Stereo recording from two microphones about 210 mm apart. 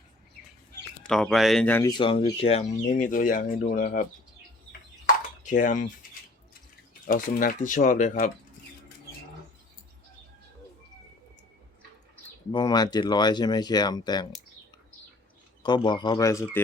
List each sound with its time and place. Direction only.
1.0 s speech: 5° left (ahead or behind)
1.9 s speech: 25° left (ahead or behind); by 4.0 s 40° left (ahead or behind)
5.0 s a sound: 35° left (ahead or behind)
7.1 s speech: 40° left (ahead or behind)
12.5 s speech: 20° left (ahead or behind)
15.6 s speech: 20° left (ahead or behind)